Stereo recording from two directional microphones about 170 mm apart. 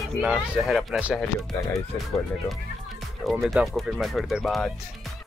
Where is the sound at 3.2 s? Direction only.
Centre (ahead or behind).